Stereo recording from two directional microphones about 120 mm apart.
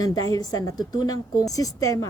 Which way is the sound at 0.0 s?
30° left (ahead or behind).